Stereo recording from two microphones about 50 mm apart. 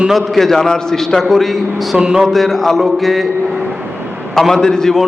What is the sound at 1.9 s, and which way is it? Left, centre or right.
Speech, centre.